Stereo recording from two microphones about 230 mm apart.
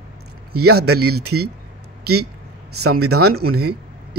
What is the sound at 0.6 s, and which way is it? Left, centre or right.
Speech, right.